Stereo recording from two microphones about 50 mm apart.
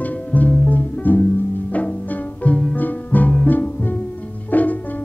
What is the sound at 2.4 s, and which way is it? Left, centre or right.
Music, left.